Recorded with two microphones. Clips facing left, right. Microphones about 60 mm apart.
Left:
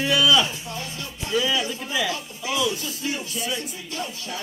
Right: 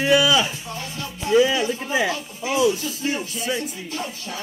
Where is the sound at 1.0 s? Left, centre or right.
Right.